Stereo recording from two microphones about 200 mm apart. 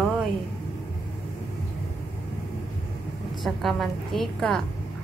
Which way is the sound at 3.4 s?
Centre (ahead or behind).